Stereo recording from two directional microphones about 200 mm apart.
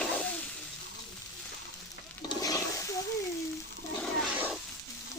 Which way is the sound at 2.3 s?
15° left (ahead or behind).